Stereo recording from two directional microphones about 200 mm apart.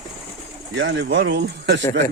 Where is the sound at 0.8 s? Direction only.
65° right (ahead or behind).